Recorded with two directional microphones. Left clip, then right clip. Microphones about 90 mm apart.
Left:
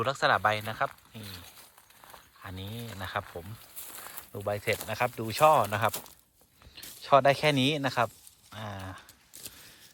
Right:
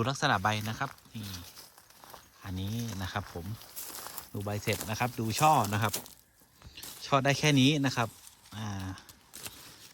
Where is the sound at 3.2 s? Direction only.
Centre (ahead or behind).